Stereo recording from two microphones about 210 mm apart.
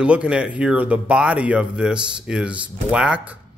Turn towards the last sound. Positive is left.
turn(degrees=-5)  # may be behind; listen again after turning